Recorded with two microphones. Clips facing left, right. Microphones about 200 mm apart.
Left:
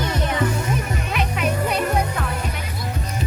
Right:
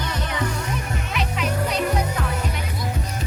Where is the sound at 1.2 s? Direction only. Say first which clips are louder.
Left 2 dB; 55° left (ahead or behind).